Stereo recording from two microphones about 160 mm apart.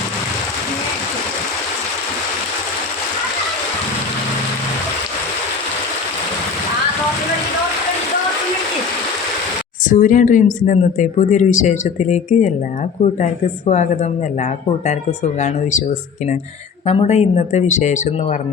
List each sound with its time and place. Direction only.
9.9 s speech: 55° left (ahead or behind)
16.8 s speech: 40° left (ahead or behind)